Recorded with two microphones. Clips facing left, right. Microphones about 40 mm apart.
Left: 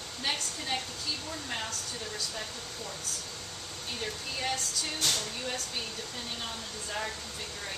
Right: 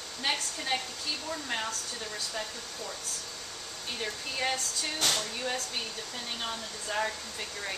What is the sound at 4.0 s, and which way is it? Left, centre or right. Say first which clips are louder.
Speech: right 3 dB; centre.